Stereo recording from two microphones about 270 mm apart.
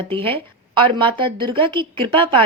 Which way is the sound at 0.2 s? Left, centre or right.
Right.